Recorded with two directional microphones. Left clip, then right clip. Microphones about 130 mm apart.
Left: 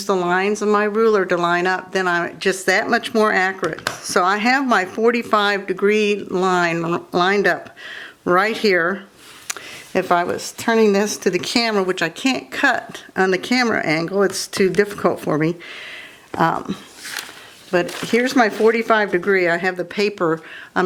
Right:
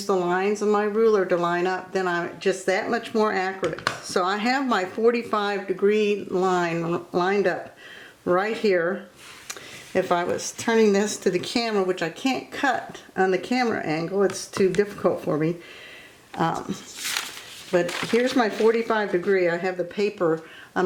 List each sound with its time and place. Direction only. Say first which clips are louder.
0.1 s speech: left 4 dB; 40° left (ahead or behind)
9.5 s speech: left 5 dB; 30° left (ahead or behind)
17.8 s speech: left 1 dB; 5° left (ahead or behind)
18.1 s speech: left 6 dB; 35° left (ahead or behind)